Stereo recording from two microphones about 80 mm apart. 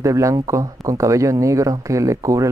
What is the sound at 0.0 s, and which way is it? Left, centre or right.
Speech, right.